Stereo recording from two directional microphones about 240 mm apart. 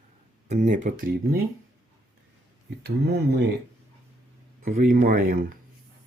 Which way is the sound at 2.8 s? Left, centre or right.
Right.